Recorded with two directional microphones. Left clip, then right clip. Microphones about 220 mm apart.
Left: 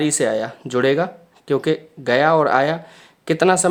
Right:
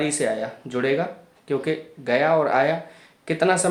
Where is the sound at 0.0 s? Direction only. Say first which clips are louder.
Left 4 dB; 30° left (ahead or behind).